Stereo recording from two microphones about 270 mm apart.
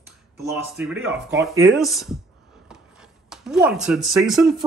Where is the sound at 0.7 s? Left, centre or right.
Centre.